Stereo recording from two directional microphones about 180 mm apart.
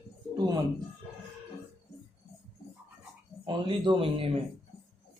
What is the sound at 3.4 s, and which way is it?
Speech, 25° right (ahead or behind).